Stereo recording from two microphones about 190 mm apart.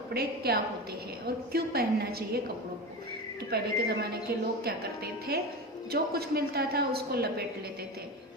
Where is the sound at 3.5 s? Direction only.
55° right (ahead or behind).